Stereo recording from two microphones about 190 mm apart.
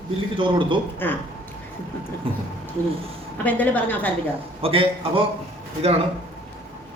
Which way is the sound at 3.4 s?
10° left (ahead or behind).